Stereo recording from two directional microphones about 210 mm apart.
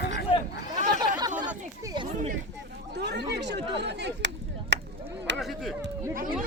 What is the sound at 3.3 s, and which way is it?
Speech, 55° right (ahead or behind).